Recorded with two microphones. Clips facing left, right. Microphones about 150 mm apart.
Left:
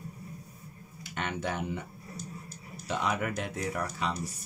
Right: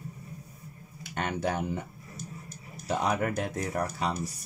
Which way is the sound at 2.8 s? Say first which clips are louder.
Right 3 dB; 40° right (ahead or behind).